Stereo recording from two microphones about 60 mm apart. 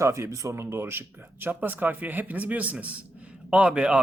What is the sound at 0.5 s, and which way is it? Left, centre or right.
Speech, right.